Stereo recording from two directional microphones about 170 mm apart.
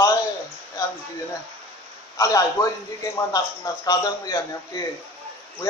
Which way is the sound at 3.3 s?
20° left (ahead or behind).